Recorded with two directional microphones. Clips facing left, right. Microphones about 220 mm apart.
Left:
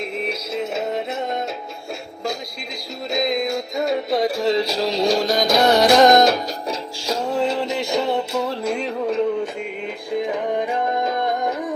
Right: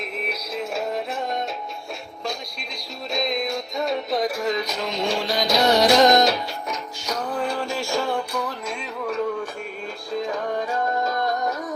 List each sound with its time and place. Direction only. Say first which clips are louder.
0.0 s music: left 4 dB; 25° left (ahead or behind)
3.1 s music: left 4 dB; 25° left (ahead or behind); by 6.4 s 50° left (ahead or behind)
6.7 s music: left 5 dB; 30° left (ahead or behind)